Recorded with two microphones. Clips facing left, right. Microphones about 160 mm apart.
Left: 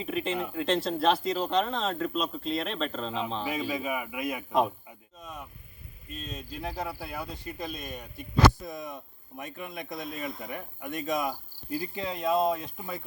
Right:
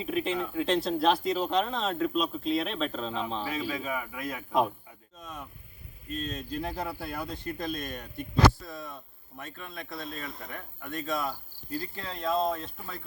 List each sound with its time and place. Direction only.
0.0 s speech: centre (ahead or behind)
3.7 s speech: 15° left (ahead or behind)
8.5 s speech: 20° left (ahead or behind)